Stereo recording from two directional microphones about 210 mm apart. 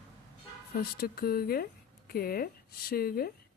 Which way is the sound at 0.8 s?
45° left (ahead or behind).